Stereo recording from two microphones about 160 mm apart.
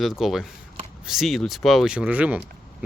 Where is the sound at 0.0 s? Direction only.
Centre (ahead or behind).